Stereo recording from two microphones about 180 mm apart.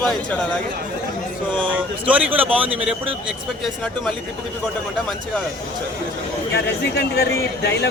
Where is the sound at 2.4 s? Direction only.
10° right (ahead or behind).